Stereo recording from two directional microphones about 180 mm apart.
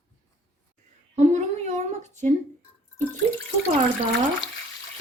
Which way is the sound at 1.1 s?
40° right (ahead or behind).